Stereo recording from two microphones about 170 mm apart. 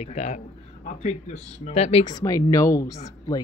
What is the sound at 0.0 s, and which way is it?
Speech, 40° left (ahead or behind).